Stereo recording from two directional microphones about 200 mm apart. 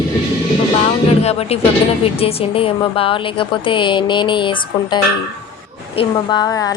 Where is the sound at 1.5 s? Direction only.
30° left (ahead or behind).